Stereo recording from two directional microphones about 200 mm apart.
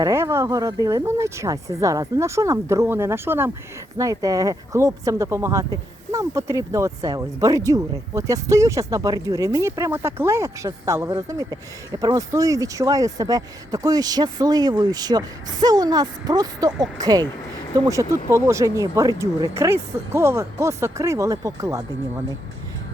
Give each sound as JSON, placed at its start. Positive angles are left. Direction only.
{"t": 0.0, "sound": "speech", "side_deg": -15}